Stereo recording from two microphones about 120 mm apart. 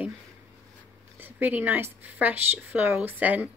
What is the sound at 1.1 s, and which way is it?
Speech, 15° right (ahead or behind).